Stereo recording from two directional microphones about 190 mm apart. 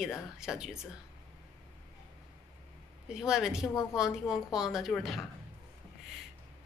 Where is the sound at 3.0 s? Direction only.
5° right (ahead or behind).